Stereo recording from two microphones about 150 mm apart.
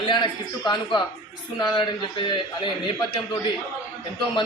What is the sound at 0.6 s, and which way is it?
A man's voice, 30° left (ahead or behind).